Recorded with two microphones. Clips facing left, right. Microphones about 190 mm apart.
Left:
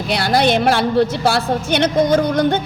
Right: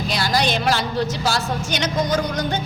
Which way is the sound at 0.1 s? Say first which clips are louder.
Left 7 dB; 60° left (ahead or behind).